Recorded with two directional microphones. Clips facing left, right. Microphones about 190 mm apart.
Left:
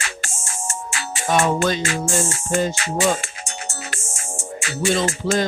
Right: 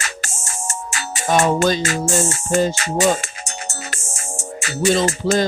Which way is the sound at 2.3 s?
40° right (ahead or behind).